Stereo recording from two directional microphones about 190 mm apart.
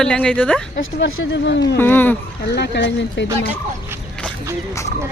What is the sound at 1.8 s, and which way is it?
Speech, 10° left (ahead or behind).